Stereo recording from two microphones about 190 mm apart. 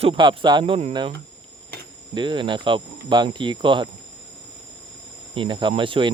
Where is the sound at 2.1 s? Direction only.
25° right (ahead or behind).